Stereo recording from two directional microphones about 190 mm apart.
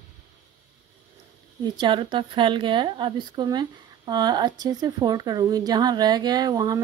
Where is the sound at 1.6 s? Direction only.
25° right (ahead or behind).